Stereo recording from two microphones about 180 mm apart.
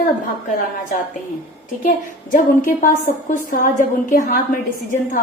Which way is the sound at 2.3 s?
45° left (ahead or behind).